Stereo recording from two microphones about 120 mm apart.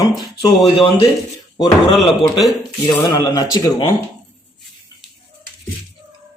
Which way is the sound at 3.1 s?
30° left (ahead or behind).